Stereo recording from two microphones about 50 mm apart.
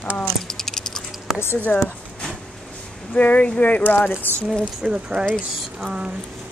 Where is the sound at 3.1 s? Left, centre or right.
Left.